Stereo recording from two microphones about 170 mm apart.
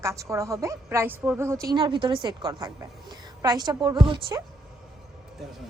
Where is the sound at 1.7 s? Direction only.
30° right (ahead or behind).